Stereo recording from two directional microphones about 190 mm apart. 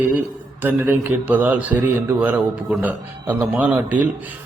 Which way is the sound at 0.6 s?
10° right (ahead or behind).